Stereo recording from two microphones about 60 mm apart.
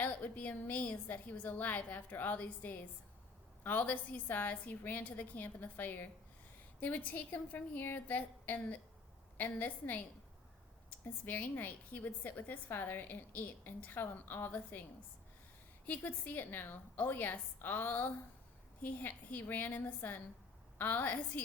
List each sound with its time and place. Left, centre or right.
0.0 s a woman's voice: left
11.0 s a woman's voice: left
15.9 s a woman's voice: left